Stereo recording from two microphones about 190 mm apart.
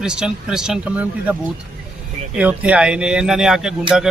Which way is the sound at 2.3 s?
5° right (ahead or behind).